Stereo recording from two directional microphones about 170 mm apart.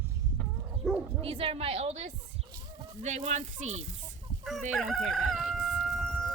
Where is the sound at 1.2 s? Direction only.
35° right (ahead or behind).